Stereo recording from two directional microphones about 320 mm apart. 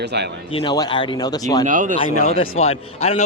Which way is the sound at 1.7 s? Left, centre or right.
Right.